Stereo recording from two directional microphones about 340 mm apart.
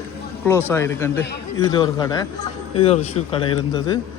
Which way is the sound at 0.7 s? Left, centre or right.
Centre.